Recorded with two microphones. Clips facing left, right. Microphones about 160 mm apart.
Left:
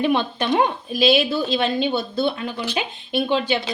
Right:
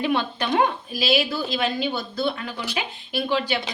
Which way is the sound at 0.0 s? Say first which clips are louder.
Left 3 dB; 20° left (ahead or behind).